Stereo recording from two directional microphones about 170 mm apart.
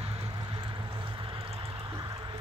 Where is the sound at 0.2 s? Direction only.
25° right (ahead or behind).